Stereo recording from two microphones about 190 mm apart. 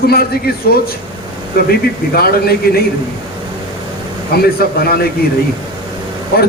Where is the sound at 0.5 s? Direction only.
55° left (ahead or behind).